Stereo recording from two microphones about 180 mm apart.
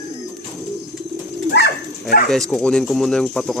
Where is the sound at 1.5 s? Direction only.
65° left (ahead or behind).